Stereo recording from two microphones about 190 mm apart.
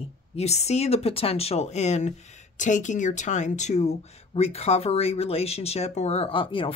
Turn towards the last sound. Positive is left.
turn(degrees=25)  # may be behind; listen again after turning